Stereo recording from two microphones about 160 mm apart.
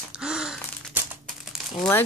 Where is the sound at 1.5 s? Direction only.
Centre (ahead or behind).